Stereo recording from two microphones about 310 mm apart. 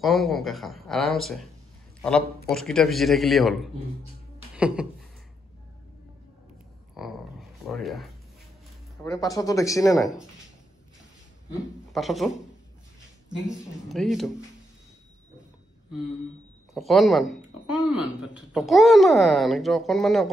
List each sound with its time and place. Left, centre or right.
0.0 s speech: centre
4.6 s a sound: centre
7.0 s a sound: centre
9.0 s speech: centre
11.9 s a man's voice: centre
13.5 s speech: centre
16.7 s speech: centre